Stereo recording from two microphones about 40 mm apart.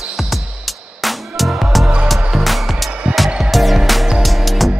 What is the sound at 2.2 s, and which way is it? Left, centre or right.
Music, right.